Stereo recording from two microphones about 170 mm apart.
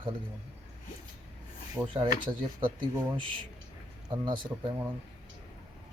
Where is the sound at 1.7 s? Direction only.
25° right (ahead or behind).